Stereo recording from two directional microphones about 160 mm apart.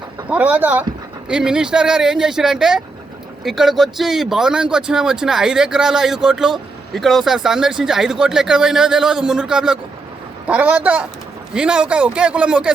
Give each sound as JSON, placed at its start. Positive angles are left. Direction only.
{"t": 0.3, "sound": "a man's voice", "side_deg": -10}